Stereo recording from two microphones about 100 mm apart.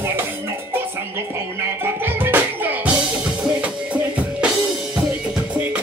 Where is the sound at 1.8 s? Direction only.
20° right (ahead or behind).